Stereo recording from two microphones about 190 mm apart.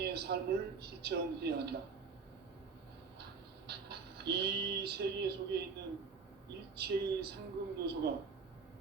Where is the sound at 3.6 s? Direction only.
60° right (ahead or behind).